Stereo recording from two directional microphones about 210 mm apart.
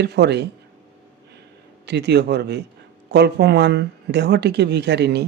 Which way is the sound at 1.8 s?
55° right (ahead or behind).